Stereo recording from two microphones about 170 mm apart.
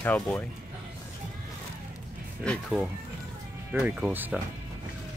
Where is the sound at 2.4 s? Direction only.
5° left (ahead or behind).